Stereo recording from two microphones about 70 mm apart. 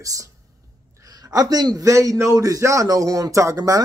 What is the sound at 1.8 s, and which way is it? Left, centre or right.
Speech, right.